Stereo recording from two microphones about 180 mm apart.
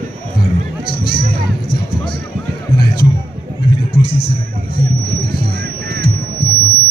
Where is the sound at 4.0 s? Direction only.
60° left (ahead or behind).